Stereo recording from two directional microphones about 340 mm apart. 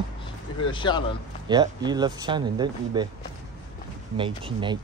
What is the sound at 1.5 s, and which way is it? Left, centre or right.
Speech, centre.